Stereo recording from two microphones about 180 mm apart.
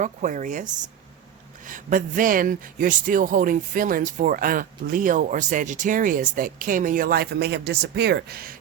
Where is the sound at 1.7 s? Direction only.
45° right (ahead or behind).